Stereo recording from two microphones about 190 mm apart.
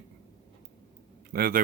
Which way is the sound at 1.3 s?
50° right (ahead or behind).